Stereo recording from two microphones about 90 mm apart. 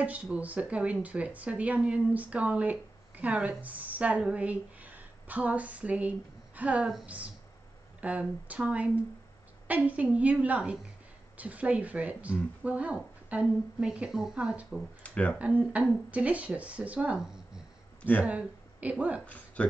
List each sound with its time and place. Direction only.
0.0 s speech: 15° right (ahead or behind)
8.0 s speech: 15° right (ahead or behind)
15.0 s speech: 15° left (ahead or behind)
15.3 s speech: 15° right (ahead or behind)
19.2 s speech: 15° left (ahead or behind)